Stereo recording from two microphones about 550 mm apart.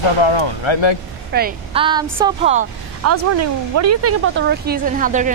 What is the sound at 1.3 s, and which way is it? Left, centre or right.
A woman's voice, centre.